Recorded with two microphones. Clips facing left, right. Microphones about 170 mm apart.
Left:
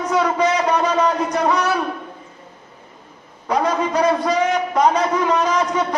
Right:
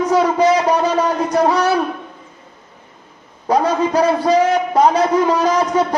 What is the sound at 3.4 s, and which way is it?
A man's voice, 35° right (ahead or behind).